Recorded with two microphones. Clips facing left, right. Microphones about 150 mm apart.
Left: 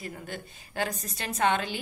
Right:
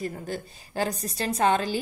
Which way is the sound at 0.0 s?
35° right (ahead or behind).